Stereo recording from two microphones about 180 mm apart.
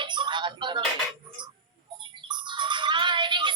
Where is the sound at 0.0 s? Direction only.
25° right (ahead or behind).